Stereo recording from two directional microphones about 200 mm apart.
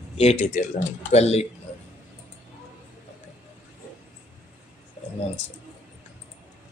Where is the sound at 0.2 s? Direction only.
35° left (ahead or behind).